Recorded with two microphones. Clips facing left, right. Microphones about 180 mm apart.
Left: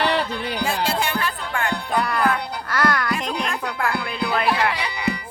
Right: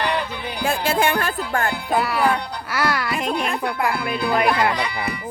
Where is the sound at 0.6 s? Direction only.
55° right (ahead or behind).